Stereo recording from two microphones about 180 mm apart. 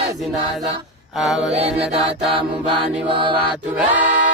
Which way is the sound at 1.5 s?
35° right (ahead or behind).